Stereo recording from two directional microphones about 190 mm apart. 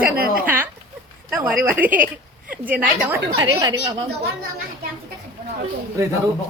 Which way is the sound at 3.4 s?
20° right (ahead or behind).